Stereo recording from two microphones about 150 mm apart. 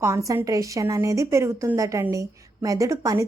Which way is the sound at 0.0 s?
20° right (ahead or behind).